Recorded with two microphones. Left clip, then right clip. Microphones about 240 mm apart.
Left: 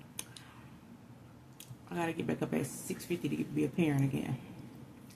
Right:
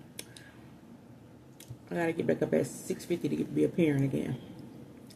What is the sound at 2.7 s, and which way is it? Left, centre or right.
Speech, centre.